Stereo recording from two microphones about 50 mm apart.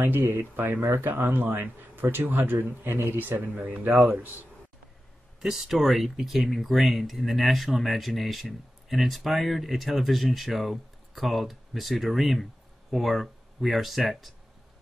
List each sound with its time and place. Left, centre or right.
0.0 s speech: right
2.5 s speech: right
5.4 s speech: centre